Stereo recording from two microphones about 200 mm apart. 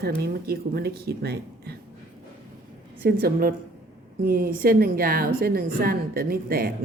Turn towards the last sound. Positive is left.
turn(degrees=-50)  # may be behind; listen again after turning